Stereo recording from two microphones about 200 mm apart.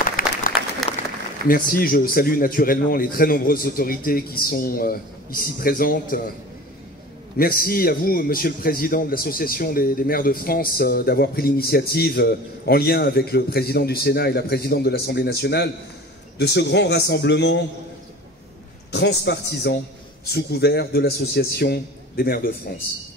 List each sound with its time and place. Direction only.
0.2 s applause: 45° left (ahead or behind)
0.9 s applause: 30° left (ahead or behind)
1.5 s a man's voice: 45° left (ahead or behind)
7.3 s a man's voice: 45° left (ahead or behind)
18.9 s a man's voice: 60° left (ahead or behind)